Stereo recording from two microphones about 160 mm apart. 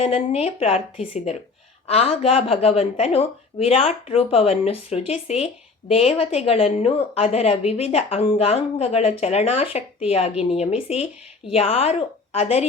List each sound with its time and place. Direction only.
0.0 s a woman's voice: 40° left (ahead or behind)